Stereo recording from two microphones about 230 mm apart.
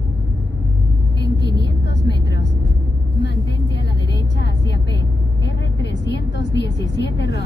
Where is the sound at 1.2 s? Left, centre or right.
Left.